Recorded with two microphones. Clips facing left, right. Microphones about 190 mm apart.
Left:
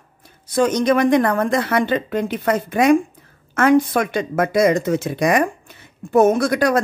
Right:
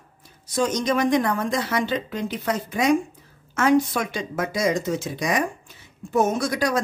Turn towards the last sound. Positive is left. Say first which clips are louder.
# left 7 dB
turn(degrees=60)  # may be behind; listen again after turning